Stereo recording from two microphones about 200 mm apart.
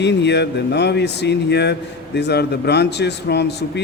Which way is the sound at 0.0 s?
60° left (ahead or behind).